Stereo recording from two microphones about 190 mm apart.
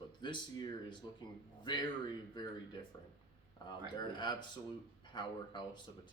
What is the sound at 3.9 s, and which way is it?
Speech, 25° left (ahead or behind).